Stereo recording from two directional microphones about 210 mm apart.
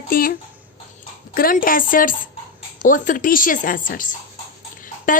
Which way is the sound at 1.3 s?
40° left (ahead or behind).